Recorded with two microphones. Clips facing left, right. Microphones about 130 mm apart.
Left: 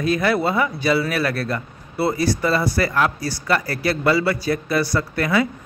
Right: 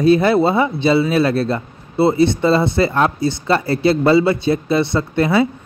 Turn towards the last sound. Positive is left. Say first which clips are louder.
# right 5 dB
turn(degrees=-25)  # may be behind; listen again after turning